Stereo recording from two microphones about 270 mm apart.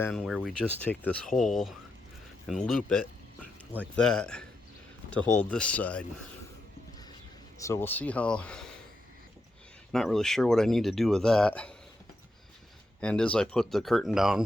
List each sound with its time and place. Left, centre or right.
0.0 s speech: centre
2.6 s a sound: centre
3.9 s speech: centre
5.5 s speech: centre
7.6 s speech: centre
9.9 s speech: centre
13.0 s speech: centre